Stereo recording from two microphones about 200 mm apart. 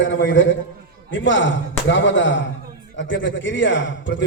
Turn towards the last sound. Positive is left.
turn(degrees=65)  # may be behind; listen again after turning